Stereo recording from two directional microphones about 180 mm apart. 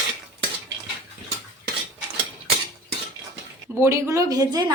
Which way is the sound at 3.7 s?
15° right (ahead or behind).